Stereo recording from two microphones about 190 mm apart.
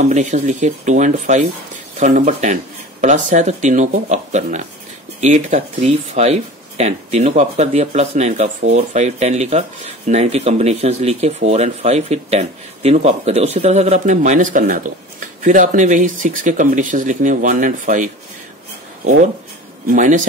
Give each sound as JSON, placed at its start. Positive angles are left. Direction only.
{"t": 0.0, "sound": "speech", "side_deg": -40}
{"t": 19.9, "sound": "speech", "side_deg": -40}